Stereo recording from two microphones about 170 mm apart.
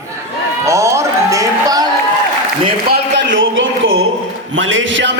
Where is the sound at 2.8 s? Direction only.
75° right (ahead or behind).